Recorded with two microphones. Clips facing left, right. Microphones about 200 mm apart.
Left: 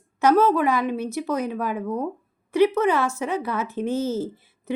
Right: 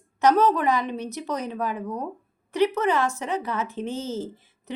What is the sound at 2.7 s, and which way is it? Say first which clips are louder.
Speech: left 2 dB; 15° right (ahead or behind).